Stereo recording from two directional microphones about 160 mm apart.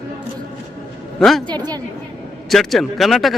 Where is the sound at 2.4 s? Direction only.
Centre (ahead or behind).